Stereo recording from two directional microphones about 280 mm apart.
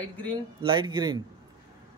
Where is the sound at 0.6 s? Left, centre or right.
Centre.